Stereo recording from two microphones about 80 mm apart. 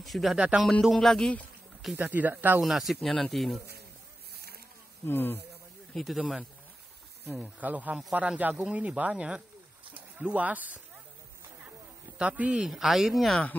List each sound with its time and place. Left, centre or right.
0.0 s speech: centre
2.0 s speech: centre
2.6 s speech: centre
5.0 s a man's voice: left
5.9 s speech: centre
7.3 s speech: centre
12.2 s speech: centre